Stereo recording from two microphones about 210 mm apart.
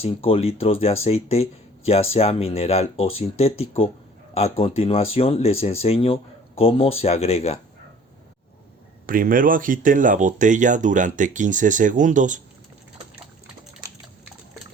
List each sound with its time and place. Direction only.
0.0 s speech: 30° left (ahead or behind)
9.0 s speech: 40° right (ahead or behind)